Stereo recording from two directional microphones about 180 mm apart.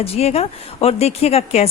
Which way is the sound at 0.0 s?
35° left (ahead or behind).